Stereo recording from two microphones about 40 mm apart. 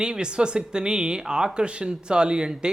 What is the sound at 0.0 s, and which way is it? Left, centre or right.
Speech, right.